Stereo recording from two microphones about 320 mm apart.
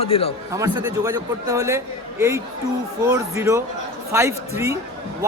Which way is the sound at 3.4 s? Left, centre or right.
Centre.